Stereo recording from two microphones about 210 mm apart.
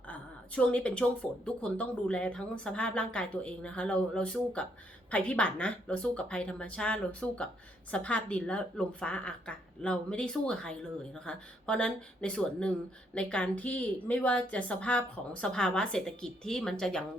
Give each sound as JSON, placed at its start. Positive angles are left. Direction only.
{"t": 0.1, "sound": "a woman's voice", "side_deg": 5}